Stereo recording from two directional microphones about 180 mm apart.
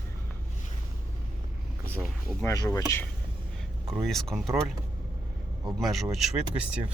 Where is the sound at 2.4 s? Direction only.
20° left (ahead or behind).